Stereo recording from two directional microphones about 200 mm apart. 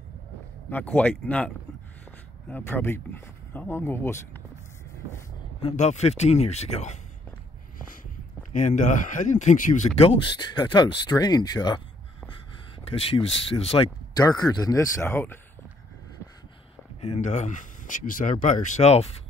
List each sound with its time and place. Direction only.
0.7 s speech: 10° left (ahead or behind)
5.6 s speech: 30° left (ahead or behind)
8.5 s speech: 40° left (ahead or behind); by 11.8 s 20° left (ahead or behind)
12.8 s speech: 30° left (ahead or behind); by 15.3 s 10° left (ahead or behind)
17.0 s speech: 35° left (ahead or behind)